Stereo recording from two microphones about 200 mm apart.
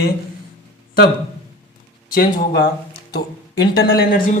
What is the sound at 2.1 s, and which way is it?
Speech, 55° left (ahead or behind).